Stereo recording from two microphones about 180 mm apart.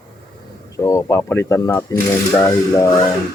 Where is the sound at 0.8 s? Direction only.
20° left (ahead or behind).